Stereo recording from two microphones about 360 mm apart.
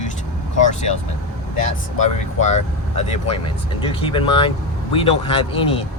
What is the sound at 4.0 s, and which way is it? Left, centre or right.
Speech, centre.